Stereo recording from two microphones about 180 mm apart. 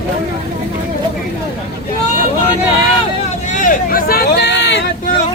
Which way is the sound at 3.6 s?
50° left (ahead or behind).